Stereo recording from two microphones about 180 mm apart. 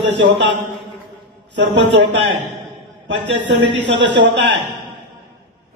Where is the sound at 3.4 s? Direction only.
85° right.